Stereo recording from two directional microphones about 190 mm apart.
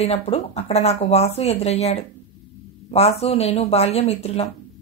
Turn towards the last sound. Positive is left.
turn(degrees=30)  # may be behind; listen again after turning